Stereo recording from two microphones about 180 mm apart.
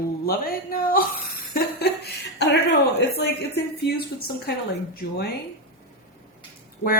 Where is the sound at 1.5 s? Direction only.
60° left (ahead or behind).